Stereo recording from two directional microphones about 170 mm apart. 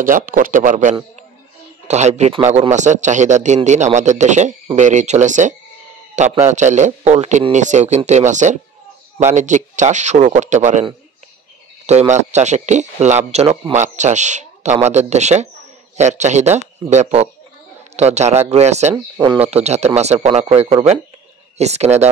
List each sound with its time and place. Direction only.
0.0 s speech: 50° right (ahead or behind)